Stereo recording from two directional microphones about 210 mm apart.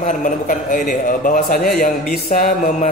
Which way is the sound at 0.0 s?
40° left (ahead or behind).